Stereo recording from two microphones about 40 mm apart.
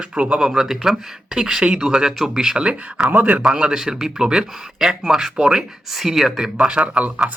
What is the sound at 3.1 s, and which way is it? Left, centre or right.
Speech, right.